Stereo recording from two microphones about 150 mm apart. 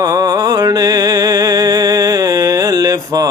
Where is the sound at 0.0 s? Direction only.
25° right (ahead or behind).